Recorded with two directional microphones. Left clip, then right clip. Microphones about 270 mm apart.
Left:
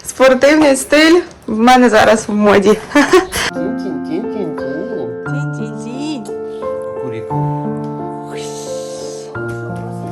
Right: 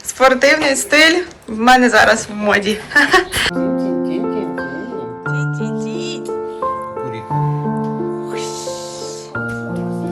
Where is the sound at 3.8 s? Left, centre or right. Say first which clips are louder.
Right 2 dB; left.